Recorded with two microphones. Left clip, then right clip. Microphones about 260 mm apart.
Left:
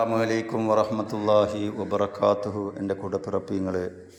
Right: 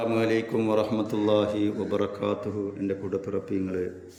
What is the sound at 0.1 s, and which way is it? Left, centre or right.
A man's voice, centre.